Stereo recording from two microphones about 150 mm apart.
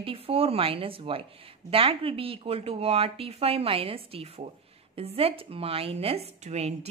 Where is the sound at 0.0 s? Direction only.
40° right (ahead or behind).